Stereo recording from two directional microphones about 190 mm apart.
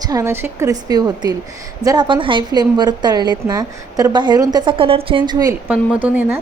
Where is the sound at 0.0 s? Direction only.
20° right (ahead or behind).